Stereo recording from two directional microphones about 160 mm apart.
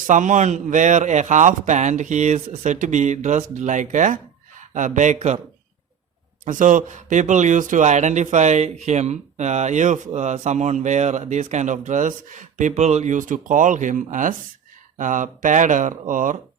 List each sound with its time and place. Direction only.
0.1 s speech: 50° right (ahead or behind)
6.4 s speech: 55° right (ahead or behind)